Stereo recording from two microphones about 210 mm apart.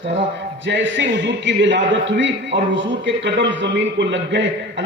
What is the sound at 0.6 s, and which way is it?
A man's voice, 60° right (ahead or behind).